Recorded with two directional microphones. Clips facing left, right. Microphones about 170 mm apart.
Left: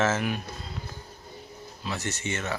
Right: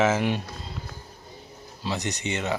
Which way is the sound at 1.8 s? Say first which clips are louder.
Right 3 dB; 20° right (ahead or behind).